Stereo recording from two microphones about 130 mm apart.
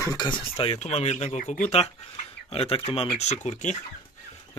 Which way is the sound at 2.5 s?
50° left (ahead or behind).